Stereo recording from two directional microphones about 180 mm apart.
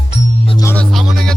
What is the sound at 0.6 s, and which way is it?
Music, 15° left (ahead or behind).